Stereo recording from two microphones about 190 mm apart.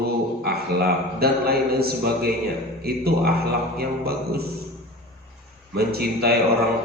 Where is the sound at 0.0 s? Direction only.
55° right (ahead or behind).